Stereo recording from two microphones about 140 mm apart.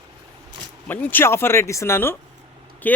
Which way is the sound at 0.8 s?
10° left (ahead or behind).